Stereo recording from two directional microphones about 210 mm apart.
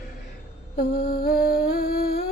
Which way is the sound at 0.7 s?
50° left (ahead or behind).